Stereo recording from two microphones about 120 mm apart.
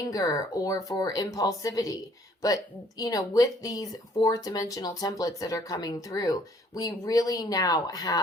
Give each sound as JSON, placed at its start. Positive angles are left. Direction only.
{"t": 0.1, "sound": "speech", "side_deg": 30}
{"t": 3.0, "sound": "speech", "side_deg": 30}